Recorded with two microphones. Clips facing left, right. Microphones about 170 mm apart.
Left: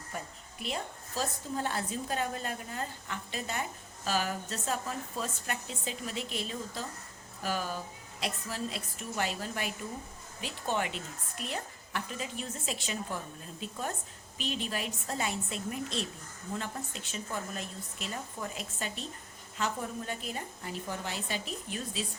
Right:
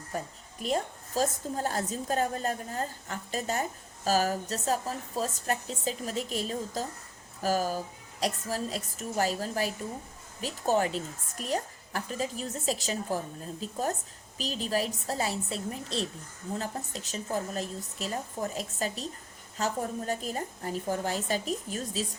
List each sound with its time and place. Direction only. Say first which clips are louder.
0.1 s a woman's voice: right 5 dB; 40° right (ahead or behind)